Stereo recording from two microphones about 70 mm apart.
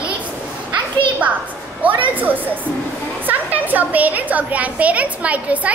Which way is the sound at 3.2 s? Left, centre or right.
Right.